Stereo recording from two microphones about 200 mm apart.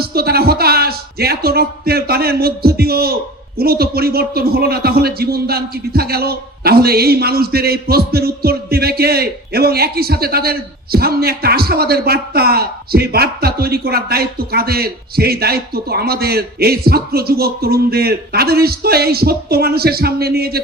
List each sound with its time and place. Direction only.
0.0 s a man's voice: 50° right (ahead or behind)